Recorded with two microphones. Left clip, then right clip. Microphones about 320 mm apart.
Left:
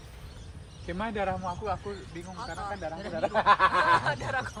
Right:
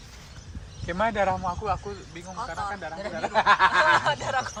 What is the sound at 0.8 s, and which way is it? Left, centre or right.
Speech, right.